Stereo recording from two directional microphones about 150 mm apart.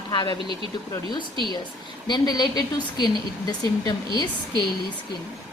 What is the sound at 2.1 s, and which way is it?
A woman's voice, 30° left (ahead or behind).